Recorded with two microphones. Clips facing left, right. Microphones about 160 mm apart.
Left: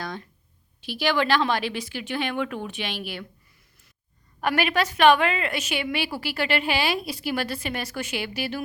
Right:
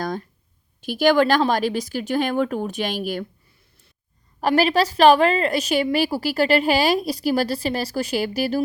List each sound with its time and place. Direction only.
0.0 s a sound: 45° right (ahead or behind)
0.8 s a woman's voice: 45° right (ahead or behind)
4.4 s a woman's voice: 35° right (ahead or behind)